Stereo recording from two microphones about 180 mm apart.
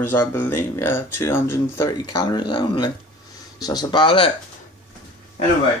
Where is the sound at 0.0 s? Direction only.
10° left (ahead or behind); by 4.3 s 30° left (ahead or behind).